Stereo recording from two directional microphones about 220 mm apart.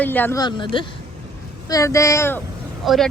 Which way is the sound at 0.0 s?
10° left (ahead or behind).